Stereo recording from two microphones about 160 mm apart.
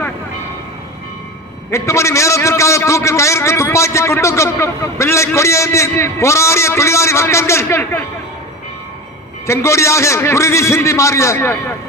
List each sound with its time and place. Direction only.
1.7 s a man's voice: 20° left (ahead or behind)
9.5 s a man's voice: 15° left (ahead or behind)